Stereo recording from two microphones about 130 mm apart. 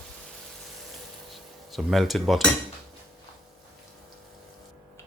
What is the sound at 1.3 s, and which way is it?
Cutlery, centre (ahead or behind).